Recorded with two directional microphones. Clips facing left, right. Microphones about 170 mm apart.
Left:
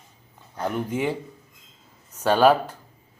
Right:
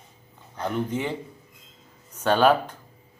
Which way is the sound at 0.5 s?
10° left (ahead or behind).